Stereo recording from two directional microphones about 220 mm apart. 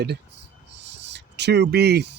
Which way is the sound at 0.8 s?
55° right (ahead or behind).